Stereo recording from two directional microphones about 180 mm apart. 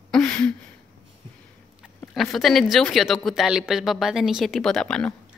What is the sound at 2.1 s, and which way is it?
Speech, centre (ahead or behind).